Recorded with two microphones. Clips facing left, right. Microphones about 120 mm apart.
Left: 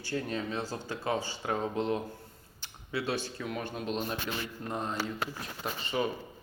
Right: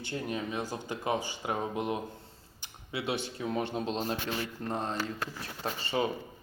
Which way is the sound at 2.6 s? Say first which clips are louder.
Left 2 dB; 20° right (ahead or behind).